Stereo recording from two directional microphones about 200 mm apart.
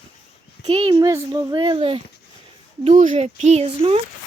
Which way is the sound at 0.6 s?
20° right (ahead or behind).